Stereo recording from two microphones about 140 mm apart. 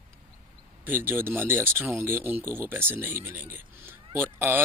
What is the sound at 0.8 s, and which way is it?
Speech, 15° right (ahead or behind).